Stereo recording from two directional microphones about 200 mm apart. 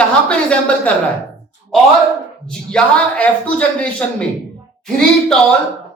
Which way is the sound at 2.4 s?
5° left (ahead or behind).